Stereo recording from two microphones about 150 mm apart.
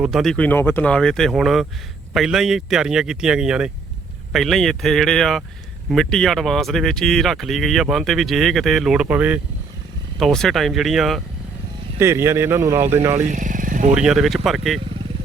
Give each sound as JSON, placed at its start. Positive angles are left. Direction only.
{"t": 0.0, "sound": "speech", "side_deg": 0}
{"t": 10.2, "sound": "speech", "side_deg": 0}
{"t": 11.9, "sound": "speech", "side_deg": -15}
{"t": 13.2, "sound": "vehicle", "side_deg": -60}
{"t": 13.9, "sound": "speech", "side_deg": -5}